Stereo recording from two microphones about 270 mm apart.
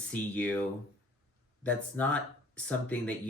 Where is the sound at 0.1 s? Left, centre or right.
Centre.